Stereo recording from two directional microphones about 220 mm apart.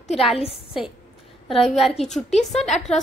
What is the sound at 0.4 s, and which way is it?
Speech, 25° left (ahead or behind).